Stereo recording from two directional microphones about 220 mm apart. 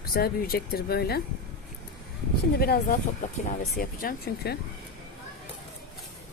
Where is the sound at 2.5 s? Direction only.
45° left (ahead or behind).